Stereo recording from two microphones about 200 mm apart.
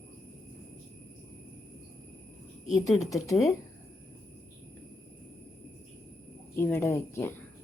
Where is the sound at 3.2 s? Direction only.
15° left (ahead or behind).